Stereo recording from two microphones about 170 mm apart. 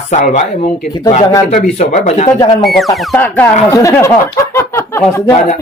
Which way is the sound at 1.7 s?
40° left (ahead or behind).